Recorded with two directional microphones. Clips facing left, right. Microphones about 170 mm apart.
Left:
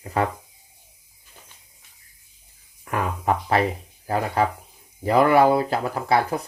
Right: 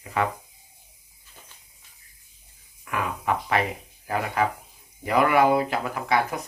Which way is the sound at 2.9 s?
40° left (ahead or behind).